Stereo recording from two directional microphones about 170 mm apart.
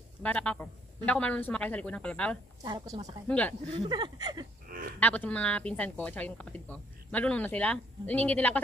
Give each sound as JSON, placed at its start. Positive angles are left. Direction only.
{"t": 0.2, "sound": "speech", "side_deg": 5}
{"t": 2.6, "sound": "speech", "side_deg": -20}
{"t": 3.3, "sound": "speech", "side_deg": 10}
{"t": 3.8, "sound": "speech", "side_deg": -25}
{"t": 5.0, "sound": "speech", "side_deg": 10}